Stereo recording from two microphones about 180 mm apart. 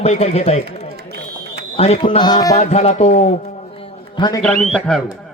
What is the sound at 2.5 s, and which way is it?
A man's voice, 35° left (ahead or behind).